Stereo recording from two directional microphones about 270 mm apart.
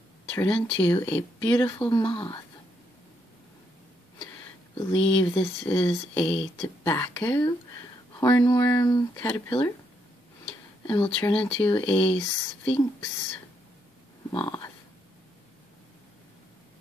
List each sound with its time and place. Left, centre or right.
0.4 s speech: centre
4.7 s speech: centre
10.9 s speech: centre
14.3 s speech: centre